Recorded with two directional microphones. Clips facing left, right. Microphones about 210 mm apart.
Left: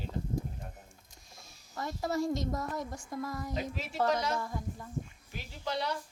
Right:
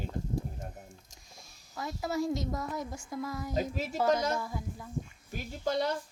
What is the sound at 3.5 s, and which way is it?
Speech, 40° right (ahead or behind).